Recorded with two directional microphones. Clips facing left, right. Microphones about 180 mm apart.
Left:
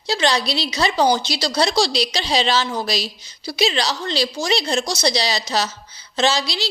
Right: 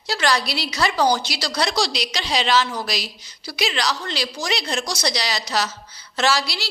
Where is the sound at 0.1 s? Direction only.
25° left (ahead or behind).